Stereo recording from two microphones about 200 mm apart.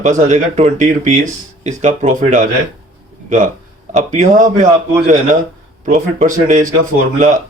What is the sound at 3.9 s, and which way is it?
Speech, 40° right (ahead or behind).